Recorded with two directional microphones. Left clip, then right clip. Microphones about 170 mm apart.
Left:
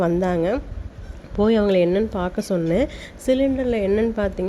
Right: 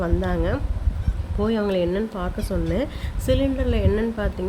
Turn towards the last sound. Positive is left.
turn(degrees=35)  # may be behind; listen again after turning